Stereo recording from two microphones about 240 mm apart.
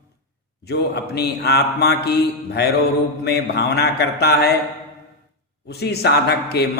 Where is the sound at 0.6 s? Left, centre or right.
Left.